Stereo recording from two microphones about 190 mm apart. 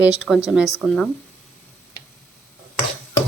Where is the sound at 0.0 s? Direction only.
5° right (ahead or behind).